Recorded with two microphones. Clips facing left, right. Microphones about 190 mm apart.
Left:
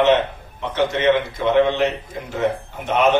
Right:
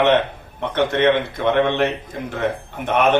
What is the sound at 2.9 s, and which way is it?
Speech, 55° right (ahead or behind).